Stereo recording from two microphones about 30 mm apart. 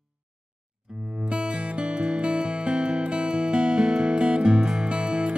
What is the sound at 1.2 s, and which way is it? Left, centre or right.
Music, right.